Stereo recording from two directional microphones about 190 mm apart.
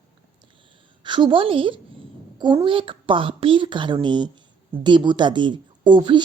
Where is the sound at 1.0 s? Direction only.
25° right (ahead or behind).